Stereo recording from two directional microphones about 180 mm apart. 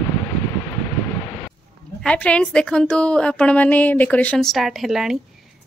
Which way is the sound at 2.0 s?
5° left (ahead or behind).